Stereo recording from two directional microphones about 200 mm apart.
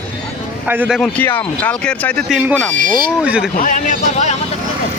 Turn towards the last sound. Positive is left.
turn(degrees=35)  # may be behind; listen again after turning